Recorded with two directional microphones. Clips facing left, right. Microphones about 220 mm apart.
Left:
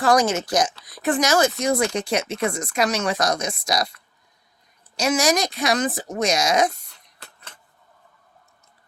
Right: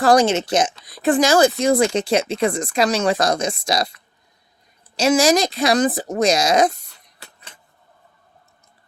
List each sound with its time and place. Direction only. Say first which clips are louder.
0.0 s speech: right 4 dB; 30° right (ahead or behind)
4.9 s speech: right 5 dB; 30° right (ahead or behind)
7.2 s a sound: right 1 dB; 15° right (ahead or behind)